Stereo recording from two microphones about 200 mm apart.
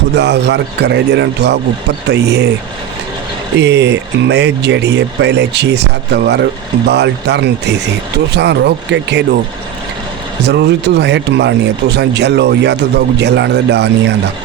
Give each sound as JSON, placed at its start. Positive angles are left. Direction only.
{"t": 0.1, "sound": "speech", "side_deg": -55}
{"t": 3.6, "sound": "speech", "side_deg": -60}
{"t": 10.4, "sound": "speech", "side_deg": -55}